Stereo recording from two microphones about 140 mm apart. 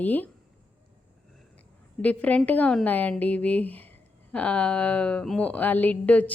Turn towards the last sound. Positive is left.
turn(degrees=10)  # may be behind; listen again after turning